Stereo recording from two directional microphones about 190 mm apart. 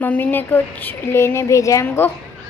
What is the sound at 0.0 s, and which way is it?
A woman's voice, 10° left (ahead or behind).